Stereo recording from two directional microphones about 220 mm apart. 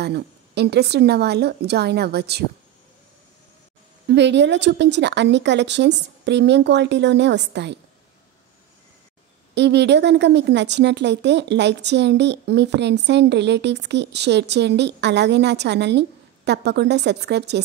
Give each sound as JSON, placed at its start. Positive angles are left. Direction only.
{"t": 0.0, "sound": "a woman's voice", "side_deg": -50}
{"t": 4.1, "sound": "a woman's voice", "side_deg": -50}
{"t": 9.6, "sound": "a woman's voice", "side_deg": -50}